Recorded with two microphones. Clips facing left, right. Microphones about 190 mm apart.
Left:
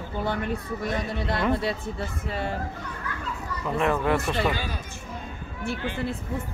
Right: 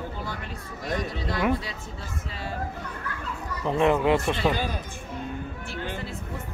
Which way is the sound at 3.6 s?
20° right (ahead or behind).